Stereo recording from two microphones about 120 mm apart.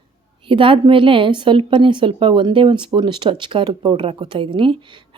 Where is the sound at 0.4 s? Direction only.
45° right (ahead or behind).